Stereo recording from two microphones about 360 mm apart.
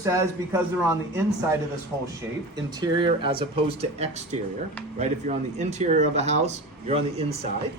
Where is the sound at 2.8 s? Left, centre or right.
Centre.